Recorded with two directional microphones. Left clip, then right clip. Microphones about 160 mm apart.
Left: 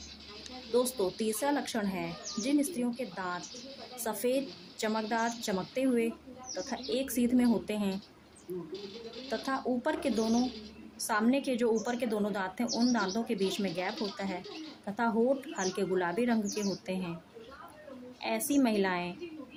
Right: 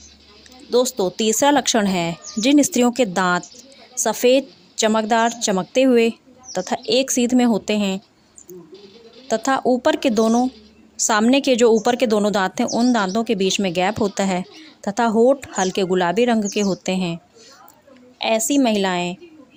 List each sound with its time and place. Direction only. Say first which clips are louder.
0.7 s a woman's voice: right 11 dB; 60° right (ahead or behind); by 3.4 s 80° right
4.0 s speech: right 16 dB; 65° right (ahead or behind)
9.3 s a woman's voice: right 15 dB; 60° right (ahead or behind)
13.9 s speech: right 15 dB; centre (ahead or behind)
14.2 s a woman's voice: right 16 dB; 70° right (ahead or behind)
14.8 s speech: right 14 dB; 60° right (ahead or behind)
18.2 s speech: right 12 dB; 60° right (ahead or behind)